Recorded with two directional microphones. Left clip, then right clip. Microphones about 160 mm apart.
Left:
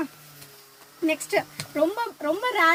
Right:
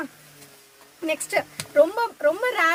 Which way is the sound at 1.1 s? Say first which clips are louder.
Right 1 dB; 20° right (ahead or behind).